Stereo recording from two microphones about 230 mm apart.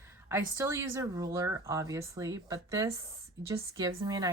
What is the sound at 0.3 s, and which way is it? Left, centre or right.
Speech, centre.